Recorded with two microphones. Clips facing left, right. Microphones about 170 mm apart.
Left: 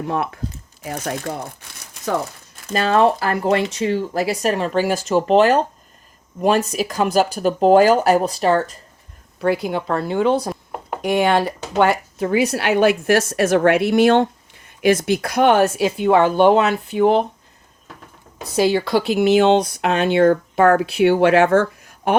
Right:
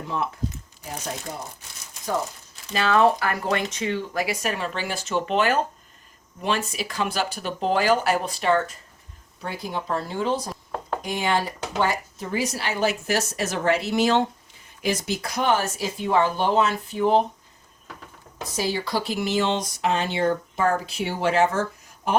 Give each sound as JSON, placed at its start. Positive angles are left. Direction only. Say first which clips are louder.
{"t": 0.0, "sound": "speech", "louder": "left 5 dB", "side_deg": 65}
{"t": 2.6, "sound": "speech", "louder": "left 4 dB", "side_deg": 45}
{"t": 9.4, "sound": "speech", "louder": "left 11 dB", "side_deg": 65}
{"t": 10.7, "sound": "a sound", "louder": "even", "side_deg": 15}
{"t": 11.0, "sound": "speech", "louder": "left 9 dB", "side_deg": 65}
{"t": 18.4, "sound": "speech", "louder": "left 9 dB", "side_deg": 65}